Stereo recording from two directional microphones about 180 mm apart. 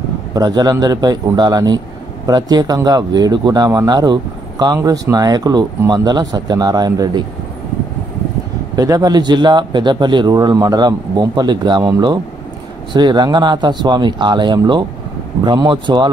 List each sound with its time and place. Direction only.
0.3 s speech: 20° right (ahead or behind)
8.7 s speech: 20° right (ahead or behind)